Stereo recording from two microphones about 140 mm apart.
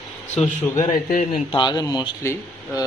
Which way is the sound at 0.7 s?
30° left (ahead or behind).